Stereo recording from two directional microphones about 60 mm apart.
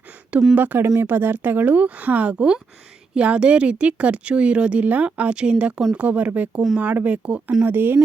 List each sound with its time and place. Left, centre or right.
0.5 s speech: right
7.6 s speech: right